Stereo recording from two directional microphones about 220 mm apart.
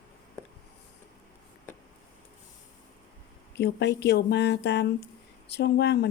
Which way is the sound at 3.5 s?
50° left (ahead or behind).